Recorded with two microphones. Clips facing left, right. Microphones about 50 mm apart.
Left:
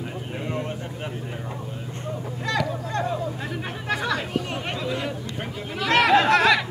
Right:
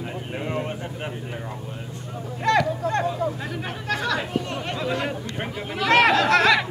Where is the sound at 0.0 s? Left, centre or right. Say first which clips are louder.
Right 1 dB; centre.